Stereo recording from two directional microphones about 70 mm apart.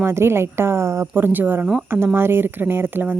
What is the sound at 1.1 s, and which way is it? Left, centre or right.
Speech, right.